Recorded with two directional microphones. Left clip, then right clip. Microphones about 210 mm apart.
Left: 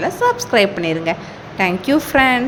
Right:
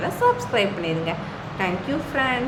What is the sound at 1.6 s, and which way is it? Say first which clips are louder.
Speech: left 9 dB; 45° left (ahead or behind).